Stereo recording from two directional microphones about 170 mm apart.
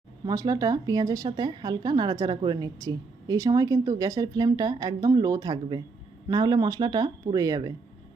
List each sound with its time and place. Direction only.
0.3 s speech: 20° right (ahead or behind)